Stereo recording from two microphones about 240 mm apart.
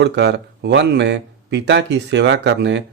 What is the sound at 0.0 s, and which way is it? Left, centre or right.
Speech, right.